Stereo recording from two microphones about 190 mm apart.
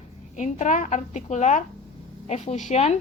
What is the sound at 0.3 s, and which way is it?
A woman's voice, 40° left (ahead or behind).